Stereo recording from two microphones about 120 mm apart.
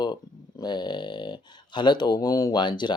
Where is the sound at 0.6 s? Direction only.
40° left (ahead or behind).